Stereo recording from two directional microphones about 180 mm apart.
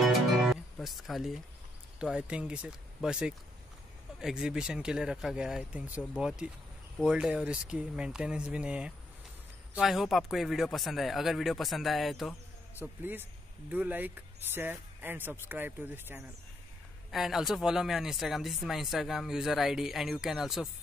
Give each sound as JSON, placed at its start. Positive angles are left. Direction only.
{"t": 0.0, "sound": "music", "side_deg": 0}
{"t": 2.0, "sound": "speech", "side_deg": -5}
{"t": 12.7, "sound": "speech", "side_deg": -10}